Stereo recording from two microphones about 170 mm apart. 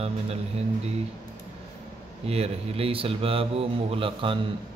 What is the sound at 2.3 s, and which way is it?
Speech, 35° right (ahead or behind).